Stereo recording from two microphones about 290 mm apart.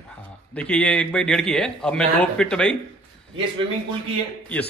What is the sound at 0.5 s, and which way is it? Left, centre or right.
A man's voice, centre.